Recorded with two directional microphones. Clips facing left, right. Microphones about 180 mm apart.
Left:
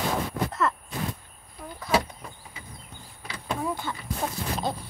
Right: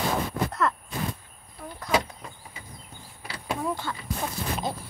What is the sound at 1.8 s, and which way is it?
Speech, 5° left (ahead or behind).